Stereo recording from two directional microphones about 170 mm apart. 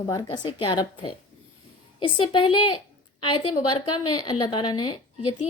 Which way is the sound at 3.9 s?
25° left (ahead or behind).